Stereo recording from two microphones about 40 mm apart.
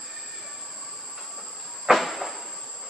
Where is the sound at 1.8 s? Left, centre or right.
Centre.